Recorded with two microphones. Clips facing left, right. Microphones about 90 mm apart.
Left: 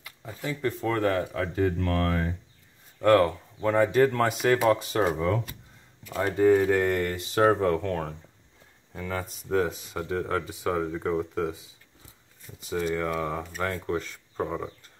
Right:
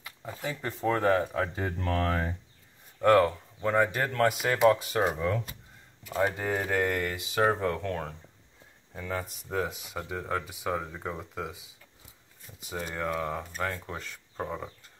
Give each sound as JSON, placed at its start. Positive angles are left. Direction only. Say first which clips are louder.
{"t": 0.0, "sound": "speech", "louder": "left 1 dB", "side_deg": -20}
{"t": 3.3, "sound": "speech", "louder": "left 3 dB", "side_deg": 5}
{"t": 6.3, "sound": "speech", "louder": "left 9 dB", "side_deg": 0}
{"t": 13.1, "sound": "speech", "louder": "left 2 dB", "side_deg": 0}